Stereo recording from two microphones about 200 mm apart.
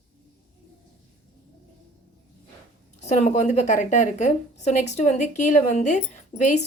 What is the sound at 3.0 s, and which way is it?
A woman's voice, 35° left (ahead or behind).